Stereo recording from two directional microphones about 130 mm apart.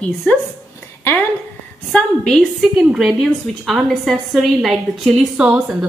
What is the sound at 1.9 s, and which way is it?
A woman's voice, 5° left (ahead or behind).